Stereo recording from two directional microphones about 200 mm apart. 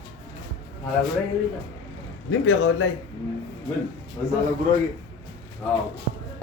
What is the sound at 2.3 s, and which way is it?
Speech, 70° left (ahead or behind).